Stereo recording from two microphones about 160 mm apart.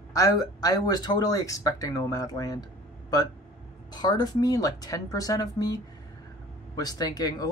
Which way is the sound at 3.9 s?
25° left (ahead or behind).